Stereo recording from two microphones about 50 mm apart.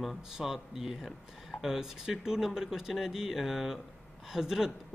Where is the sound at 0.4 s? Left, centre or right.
Centre.